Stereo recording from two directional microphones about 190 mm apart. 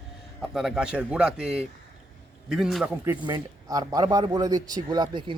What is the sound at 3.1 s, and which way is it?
Speech, 15° right (ahead or behind).